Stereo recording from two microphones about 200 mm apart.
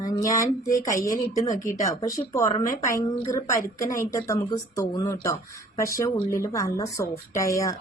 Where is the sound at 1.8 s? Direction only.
15° left (ahead or behind).